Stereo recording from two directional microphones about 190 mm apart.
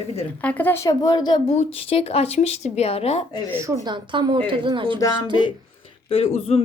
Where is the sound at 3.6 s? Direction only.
20° right (ahead or behind).